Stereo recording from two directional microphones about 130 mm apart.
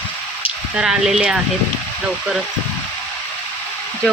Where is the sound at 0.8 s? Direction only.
5° right (ahead or behind).